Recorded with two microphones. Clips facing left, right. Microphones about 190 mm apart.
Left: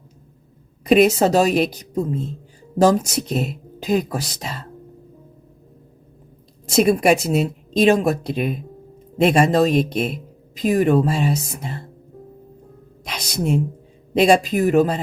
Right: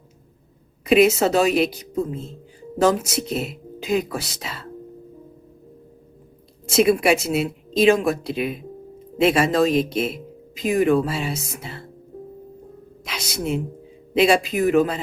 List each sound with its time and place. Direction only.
0.9 s speech: 40° left (ahead or behind)
3.2 s speech: 40° left (ahead or behind)
6.7 s speech: 40° left (ahead or behind)
13.1 s a woman's voice: 40° left (ahead or behind)